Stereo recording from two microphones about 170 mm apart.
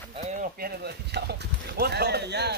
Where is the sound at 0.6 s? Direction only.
75° right (ahead or behind).